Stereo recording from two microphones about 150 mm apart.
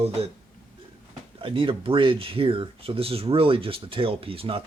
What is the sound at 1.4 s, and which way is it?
Speech, 35° right (ahead or behind).